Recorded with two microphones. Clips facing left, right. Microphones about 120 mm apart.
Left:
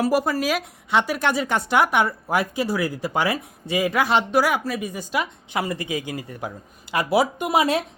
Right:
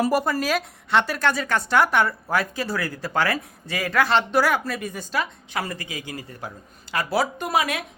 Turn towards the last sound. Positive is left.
turn(degrees=30)  # may be behind; listen again after turning